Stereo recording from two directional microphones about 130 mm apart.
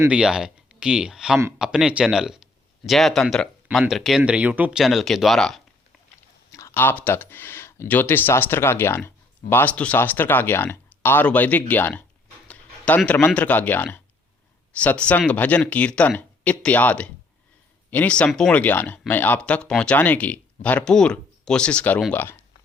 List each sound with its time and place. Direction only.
0.1 s speech: 5° right (ahead or behind)
6.5 s speech: 20° left (ahead or behind)
12.5 s a sound: 10° left (ahead or behind)
13.1 s speech: 10° left (ahead or behind)